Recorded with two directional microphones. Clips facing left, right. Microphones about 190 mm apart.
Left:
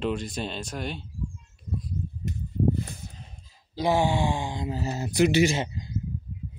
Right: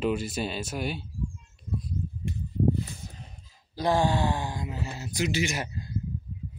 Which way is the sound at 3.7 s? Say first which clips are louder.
Left 1 dB; 10° left (ahead or behind).